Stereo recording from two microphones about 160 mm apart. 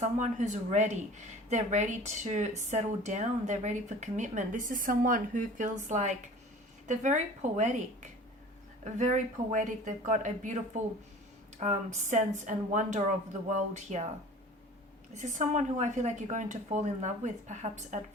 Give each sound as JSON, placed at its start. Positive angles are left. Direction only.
{"t": 0.0, "sound": "speech", "side_deg": -50}
{"t": 15.1, "sound": "speech", "side_deg": -50}